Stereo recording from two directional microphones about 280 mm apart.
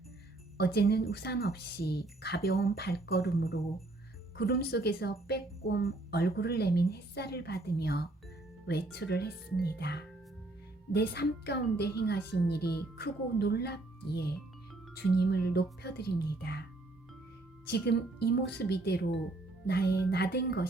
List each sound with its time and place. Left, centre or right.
0.5 s a woman's voice: left
17.7 s a woman's voice: left